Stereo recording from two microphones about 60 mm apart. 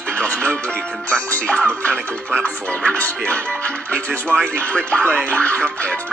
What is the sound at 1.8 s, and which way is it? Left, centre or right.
Music, centre.